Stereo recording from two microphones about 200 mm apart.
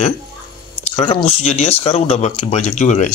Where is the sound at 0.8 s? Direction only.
30° left (ahead or behind).